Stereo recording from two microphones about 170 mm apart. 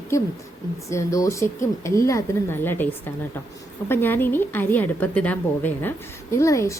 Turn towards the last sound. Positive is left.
turn(degrees=15)  # may be behind; listen again after turning